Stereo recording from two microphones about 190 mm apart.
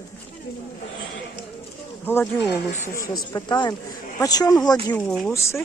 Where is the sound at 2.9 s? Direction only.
15° left (ahead or behind).